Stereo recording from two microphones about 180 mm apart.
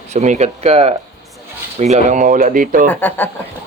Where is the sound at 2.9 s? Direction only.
10° left (ahead or behind).